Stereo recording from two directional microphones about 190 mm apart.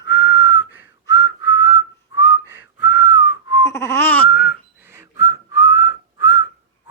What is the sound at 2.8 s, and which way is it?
Whistling, 70° left (ahead or behind).